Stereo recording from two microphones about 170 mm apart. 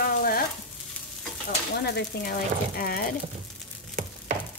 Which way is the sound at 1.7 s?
75° left (ahead or behind).